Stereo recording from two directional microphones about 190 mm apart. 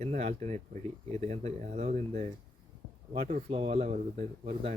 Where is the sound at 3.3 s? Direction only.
35° right (ahead or behind).